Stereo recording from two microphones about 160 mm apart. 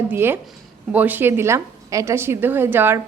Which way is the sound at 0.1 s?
15° right (ahead or behind).